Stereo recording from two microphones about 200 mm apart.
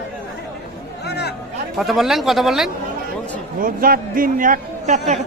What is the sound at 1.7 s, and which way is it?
Speech, centre (ahead or behind).